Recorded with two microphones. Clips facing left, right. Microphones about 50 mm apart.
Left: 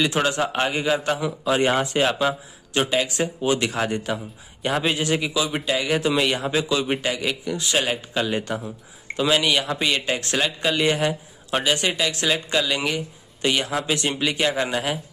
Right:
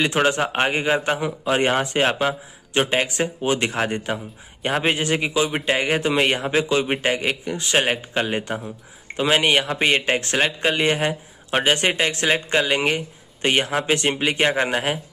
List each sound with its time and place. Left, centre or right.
0.0 s speech: right